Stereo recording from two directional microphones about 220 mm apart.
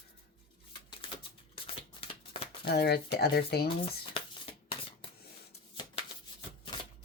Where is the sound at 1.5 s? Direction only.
25° left (ahead or behind).